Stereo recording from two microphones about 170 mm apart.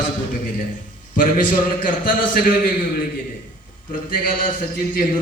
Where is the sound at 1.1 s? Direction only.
50° left (ahead or behind).